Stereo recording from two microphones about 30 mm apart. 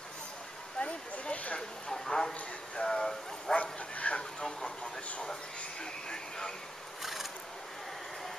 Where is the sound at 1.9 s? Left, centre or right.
Left.